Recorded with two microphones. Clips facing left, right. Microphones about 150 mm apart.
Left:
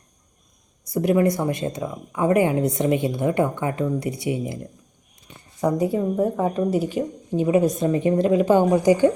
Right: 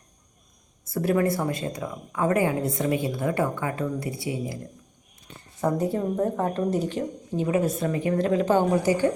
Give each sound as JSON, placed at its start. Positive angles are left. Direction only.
{"t": 0.9, "sound": "speech", "side_deg": 20}
{"t": 5.5, "sound": "speech", "side_deg": 0}